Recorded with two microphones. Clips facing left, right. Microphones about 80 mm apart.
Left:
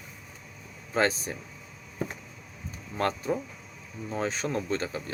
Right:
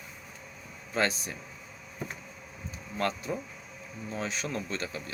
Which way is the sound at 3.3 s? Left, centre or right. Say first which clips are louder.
Left 5 dB; left.